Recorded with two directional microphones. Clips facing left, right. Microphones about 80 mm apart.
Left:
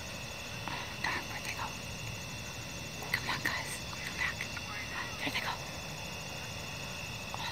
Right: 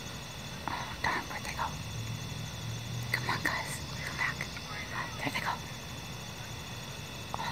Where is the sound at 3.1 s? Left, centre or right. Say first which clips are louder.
Right 3 dB; right.